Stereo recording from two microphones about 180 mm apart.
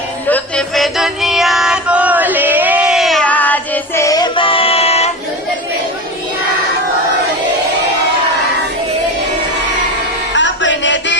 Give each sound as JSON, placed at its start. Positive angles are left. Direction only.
{"t": 0.3, "sound": "music", "side_deg": 5}
{"t": 10.3, "sound": "music", "side_deg": 90}